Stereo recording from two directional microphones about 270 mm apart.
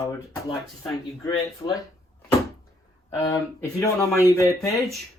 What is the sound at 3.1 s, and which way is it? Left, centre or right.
Speech, centre.